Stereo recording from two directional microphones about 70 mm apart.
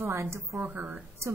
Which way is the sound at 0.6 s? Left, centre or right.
Right.